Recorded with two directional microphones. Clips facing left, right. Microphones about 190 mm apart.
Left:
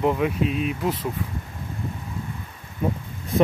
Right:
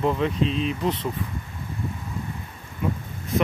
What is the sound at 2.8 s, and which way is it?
Speech, 40° left (ahead or behind).